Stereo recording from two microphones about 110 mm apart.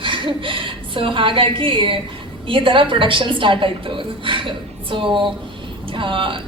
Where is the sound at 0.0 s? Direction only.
50° right (ahead or behind).